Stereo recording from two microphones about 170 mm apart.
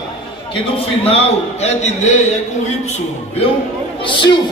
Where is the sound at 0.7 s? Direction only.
35° left (ahead or behind).